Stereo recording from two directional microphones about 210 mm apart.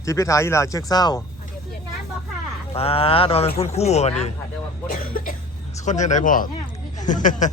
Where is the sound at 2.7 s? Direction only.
25° left (ahead or behind).